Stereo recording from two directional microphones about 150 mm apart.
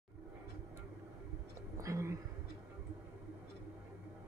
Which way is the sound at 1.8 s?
20° right (ahead or behind).